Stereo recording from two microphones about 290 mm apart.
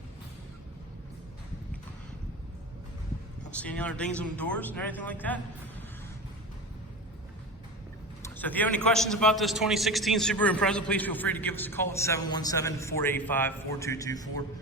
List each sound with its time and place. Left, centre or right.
3.5 s a man's voice: centre
8.4 s a man's voice: centre